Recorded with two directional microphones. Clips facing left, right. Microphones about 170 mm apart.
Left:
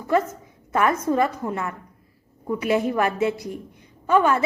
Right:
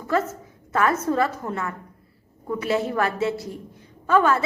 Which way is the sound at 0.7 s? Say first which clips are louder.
Left 1 dB; 15° left (ahead or behind).